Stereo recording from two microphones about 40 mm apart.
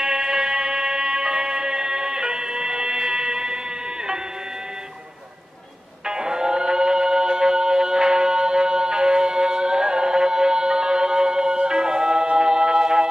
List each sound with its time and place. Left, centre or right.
0.0 s music: centre
6.0 s music: centre